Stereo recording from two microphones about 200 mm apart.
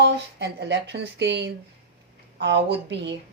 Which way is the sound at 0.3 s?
55° right (ahead or behind).